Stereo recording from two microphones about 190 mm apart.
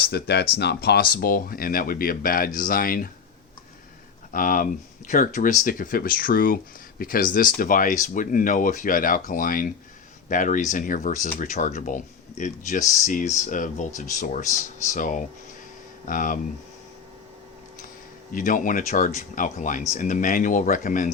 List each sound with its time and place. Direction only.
0.0 s speech: 60° left (ahead or behind)
4.3 s speech: 45° left (ahead or behind)
18.3 s speech: 45° left (ahead or behind)